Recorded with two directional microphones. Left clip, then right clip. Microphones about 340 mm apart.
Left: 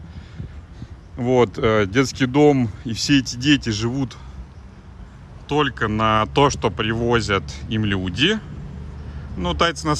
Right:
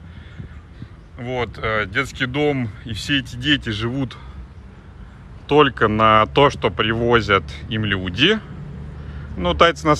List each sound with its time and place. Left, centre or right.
1.1 s speech: centre
5.5 s speech: centre